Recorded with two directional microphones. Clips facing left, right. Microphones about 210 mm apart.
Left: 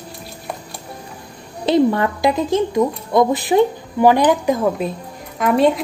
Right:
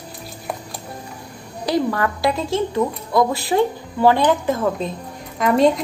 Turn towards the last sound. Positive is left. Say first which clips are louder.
# left 1 dB
turn(degrees=5)  # may be behind; listen again after turning